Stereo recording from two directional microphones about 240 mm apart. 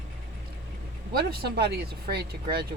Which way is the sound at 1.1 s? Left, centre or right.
Right.